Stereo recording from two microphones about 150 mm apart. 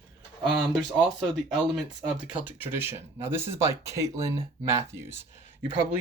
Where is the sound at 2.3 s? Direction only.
10° right (ahead or behind).